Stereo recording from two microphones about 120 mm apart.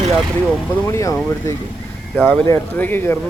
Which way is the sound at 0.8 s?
25° left (ahead or behind).